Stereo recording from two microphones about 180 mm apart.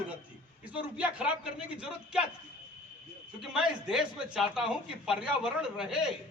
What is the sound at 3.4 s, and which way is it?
A man's voice, centre (ahead or behind).